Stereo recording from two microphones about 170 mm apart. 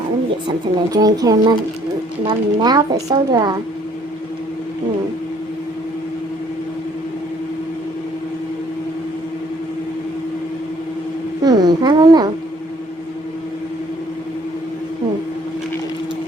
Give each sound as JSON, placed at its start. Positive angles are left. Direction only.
{"t": 0.4, "sound": "speech", "side_deg": -20}
{"t": 11.4, "sound": "speech", "side_deg": -25}